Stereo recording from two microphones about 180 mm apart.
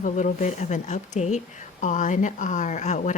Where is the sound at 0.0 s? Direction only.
45° left (ahead or behind).